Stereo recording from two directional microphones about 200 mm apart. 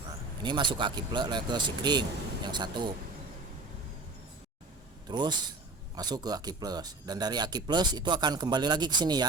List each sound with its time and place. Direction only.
0.4 s speech: 25° right (ahead or behind)
5.0 s speech: 20° right (ahead or behind)